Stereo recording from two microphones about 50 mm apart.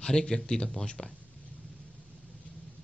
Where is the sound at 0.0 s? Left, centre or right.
Centre.